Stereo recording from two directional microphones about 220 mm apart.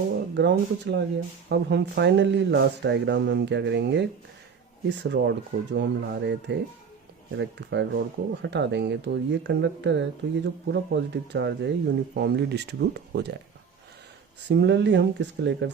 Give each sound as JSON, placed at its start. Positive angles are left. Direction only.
{"t": 0.3, "sound": "speech", "side_deg": -50}
{"t": 5.0, "sound": "speech", "side_deg": -50}
{"t": 14.4, "sound": "speech", "side_deg": -50}